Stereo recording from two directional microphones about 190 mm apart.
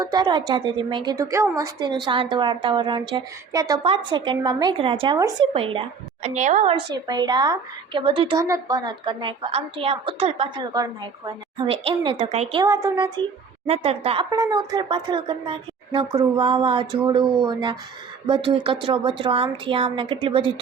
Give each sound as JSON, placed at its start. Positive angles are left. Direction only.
{"t": 0.0, "sound": "a woman's voice", "side_deg": -20}
{"t": 6.2, "sound": "a woman's voice", "side_deg": -40}
{"t": 6.7, "sound": "a woman's voice", "side_deg": -20}
{"t": 12.6, "sound": "speech", "side_deg": -15}
{"t": 13.7, "sound": "a woman's voice", "side_deg": -30}
{"t": 14.3, "sound": "a woman's voice", "side_deg": -20}